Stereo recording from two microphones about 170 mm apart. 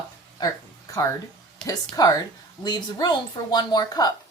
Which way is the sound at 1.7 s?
20° left (ahead or behind).